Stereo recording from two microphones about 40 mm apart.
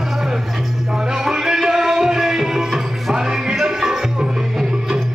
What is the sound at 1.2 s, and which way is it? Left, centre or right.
Music, centre.